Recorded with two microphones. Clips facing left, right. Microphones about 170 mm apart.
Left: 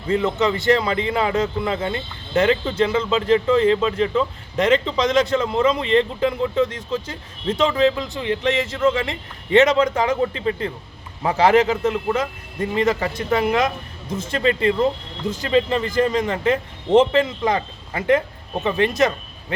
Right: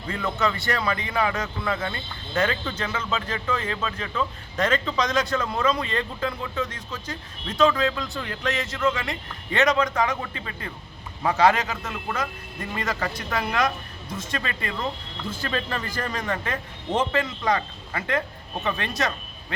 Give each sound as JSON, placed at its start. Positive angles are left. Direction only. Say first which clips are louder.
{"t": 0.1, "sound": "speech", "louder": "left 7 dB", "side_deg": 25}